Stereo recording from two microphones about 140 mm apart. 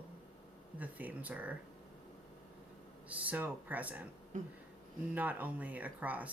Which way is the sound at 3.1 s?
10° right (ahead or behind).